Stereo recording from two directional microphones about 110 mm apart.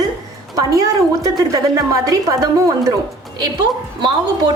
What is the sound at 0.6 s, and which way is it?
A woman's voice, 35° right (ahead or behind).